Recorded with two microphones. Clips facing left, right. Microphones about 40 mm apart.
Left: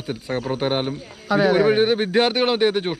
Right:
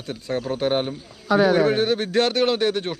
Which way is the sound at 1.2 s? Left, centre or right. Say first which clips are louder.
Left 1 dB; centre.